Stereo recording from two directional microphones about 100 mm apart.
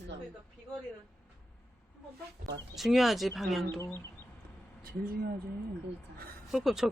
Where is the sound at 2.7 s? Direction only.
Centre (ahead or behind).